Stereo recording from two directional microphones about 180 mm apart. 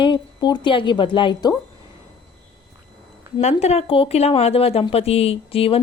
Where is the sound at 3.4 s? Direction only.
40° left (ahead or behind).